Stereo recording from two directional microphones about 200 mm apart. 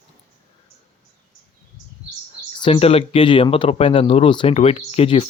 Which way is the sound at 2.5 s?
25° left (ahead or behind).